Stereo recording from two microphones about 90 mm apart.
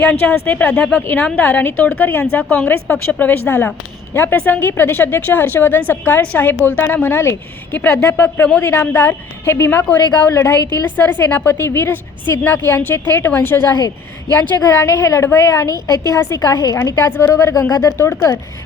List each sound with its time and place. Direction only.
0.0 s a woman's voice: 25° left (ahead or behind)
10.2 s a woman's voice: 35° left (ahead or behind)
10.8 s a woman's voice: 20° left (ahead or behind); by 16.7 s 45° left (ahead or behind)
16.7 s a woman's voice: 30° left (ahead or behind)